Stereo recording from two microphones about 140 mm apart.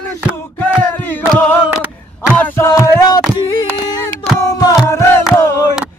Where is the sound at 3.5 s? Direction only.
25° left (ahead or behind).